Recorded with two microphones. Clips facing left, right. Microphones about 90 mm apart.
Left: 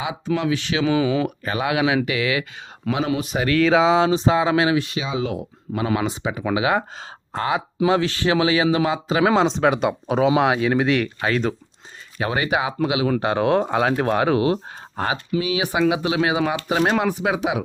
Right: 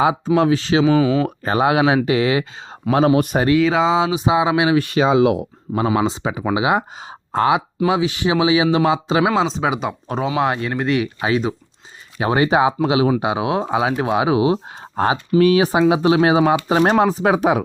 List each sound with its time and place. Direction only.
0.3 s speech: 35° right (ahead or behind)
0.9 s speech: centre (ahead or behind)
1.5 s speech: 30° right (ahead or behind)
2.8 s speech: 10° right (ahead or behind)
3.2 s speech: 50° right (ahead or behind)
3.6 s speech: centre (ahead or behind); by 4.7 s 15° right (ahead or behind)
4.8 s speech: 60° right (ahead or behind); by 5.5 s 80° right
6.0 s speech: 25° right (ahead or behind)
7.9 s speech: 10° right (ahead or behind)
9.2 s speech: centre (ahead or behind)
12.2 s speech: 30° right (ahead or behind)
13.1 s speech: 10° right (ahead or behind); by 15.4 s 30° right (ahead or behind)
15.4 s speech: 45° right (ahead or behind)